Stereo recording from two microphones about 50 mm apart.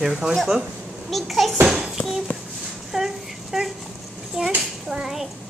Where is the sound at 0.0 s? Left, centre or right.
Centre.